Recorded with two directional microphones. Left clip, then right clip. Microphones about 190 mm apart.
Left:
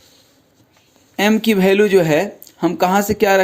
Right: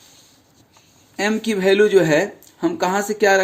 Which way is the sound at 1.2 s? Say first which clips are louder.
Left 5 dB; 40° left (ahead or behind).